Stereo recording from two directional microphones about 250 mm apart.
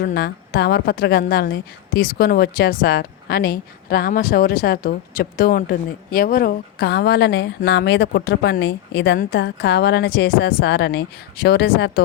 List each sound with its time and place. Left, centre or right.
0.0 s a woman's voice: left